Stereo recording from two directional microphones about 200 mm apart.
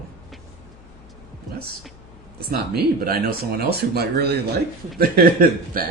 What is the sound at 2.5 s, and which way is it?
Speech, 50° right (ahead or behind).